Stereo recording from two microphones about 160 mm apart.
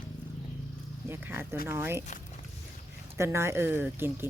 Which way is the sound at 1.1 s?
10° right (ahead or behind).